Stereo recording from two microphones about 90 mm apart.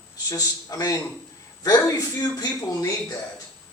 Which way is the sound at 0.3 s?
45° left (ahead or behind).